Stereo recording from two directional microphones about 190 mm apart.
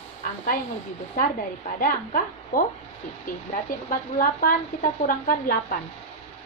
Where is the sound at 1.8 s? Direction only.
45° left (ahead or behind).